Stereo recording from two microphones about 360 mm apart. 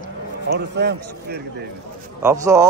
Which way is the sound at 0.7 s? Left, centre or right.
Right.